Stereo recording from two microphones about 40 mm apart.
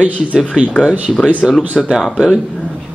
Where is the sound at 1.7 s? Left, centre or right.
Centre.